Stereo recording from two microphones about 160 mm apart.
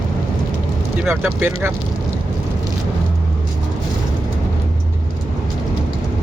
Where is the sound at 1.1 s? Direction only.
15° right (ahead or behind).